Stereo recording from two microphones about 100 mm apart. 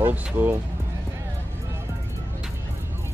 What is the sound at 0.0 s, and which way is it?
Speech, 20° right (ahead or behind).